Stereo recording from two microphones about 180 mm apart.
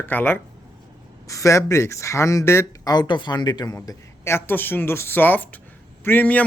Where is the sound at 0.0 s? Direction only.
10° left (ahead or behind).